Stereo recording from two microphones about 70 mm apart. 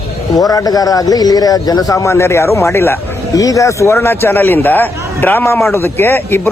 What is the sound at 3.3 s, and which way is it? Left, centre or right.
Speech, left.